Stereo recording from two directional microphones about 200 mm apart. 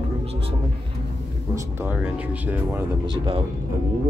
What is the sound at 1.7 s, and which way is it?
Speech, 10° right (ahead or behind).